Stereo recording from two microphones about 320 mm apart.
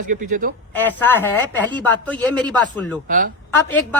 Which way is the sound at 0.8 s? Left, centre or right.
Centre.